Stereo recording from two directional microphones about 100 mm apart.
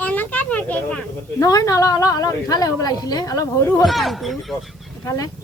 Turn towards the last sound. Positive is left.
turn(degrees=35)  # may be behind; listen again after turning